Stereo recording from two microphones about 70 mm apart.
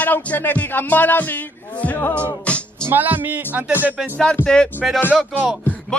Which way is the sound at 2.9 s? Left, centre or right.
Right.